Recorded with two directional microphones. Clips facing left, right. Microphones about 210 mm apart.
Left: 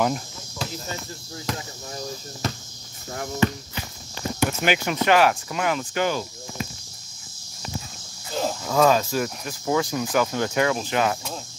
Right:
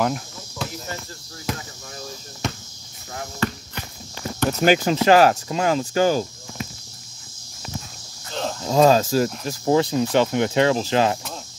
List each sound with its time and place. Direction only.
0.0 s cricket: centre (ahead or behind)
3.4 s walk: 20° left (ahead or behind)
4.5 s speech: 35° right (ahead or behind)
8.3 s cricket: 5° left (ahead or behind)
8.6 s speech: 30° right (ahead or behind)